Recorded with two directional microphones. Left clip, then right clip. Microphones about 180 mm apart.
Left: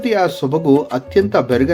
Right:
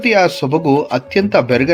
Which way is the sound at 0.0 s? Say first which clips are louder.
Right 3 dB; 30° right (ahead or behind).